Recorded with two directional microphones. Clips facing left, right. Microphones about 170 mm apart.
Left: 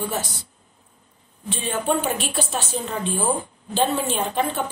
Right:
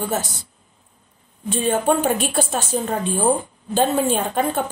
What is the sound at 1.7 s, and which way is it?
A woman's voice, 50° right (ahead or behind).